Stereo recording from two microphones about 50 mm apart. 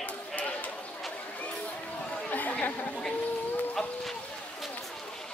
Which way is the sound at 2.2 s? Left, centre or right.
Left.